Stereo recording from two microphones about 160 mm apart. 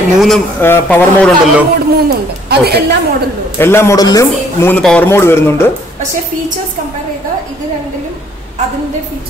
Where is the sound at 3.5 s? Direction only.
15° left (ahead or behind).